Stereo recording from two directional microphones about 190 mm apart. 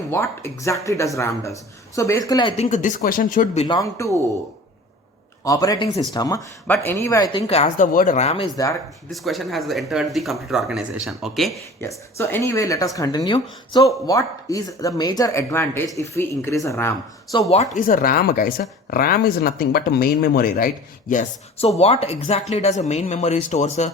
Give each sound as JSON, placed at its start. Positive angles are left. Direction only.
{"t": 0.1, "sound": "speech", "side_deg": 15}
{"t": 2.6, "sound": "speech", "side_deg": 40}
{"t": 3.8, "sound": "speech", "side_deg": 15}
{"t": 5.5, "sound": "speech", "side_deg": 20}
{"t": 7.4, "sound": "speech", "side_deg": 35}
{"t": 9.0, "sound": "speech", "side_deg": 0}
{"t": 11.8, "sound": "speech", "side_deg": 15}
{"t": 17.7, "sound": "speech", "side_deg": 45}